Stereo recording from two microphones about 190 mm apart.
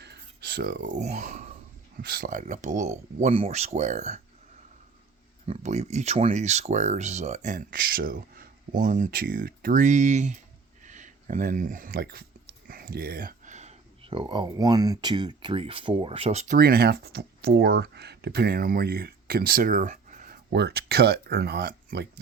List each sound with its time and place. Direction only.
0.0 s a sound: 60° right (ahead or behind)
0.9 s speech: 40° right (ahead or behind)
2.0 s speech: 50° right (ahead or behind)
5.5 s speech: 35° right (ahead or behind)
16.6 s speech: 55° right (ahead or behind)